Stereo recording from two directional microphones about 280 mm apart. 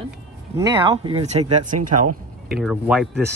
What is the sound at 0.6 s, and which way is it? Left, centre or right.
Speech, centre.